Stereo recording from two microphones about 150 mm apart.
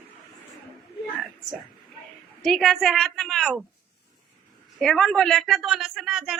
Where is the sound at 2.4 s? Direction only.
5° left (ahead or behind).